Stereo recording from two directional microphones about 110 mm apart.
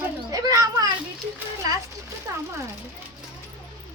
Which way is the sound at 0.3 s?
35° right (ahead or behind).